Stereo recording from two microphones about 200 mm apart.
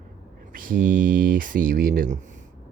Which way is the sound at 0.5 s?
45° right (ahead or behind).